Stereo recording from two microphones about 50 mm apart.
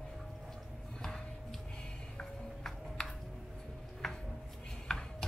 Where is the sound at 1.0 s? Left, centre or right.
Centre.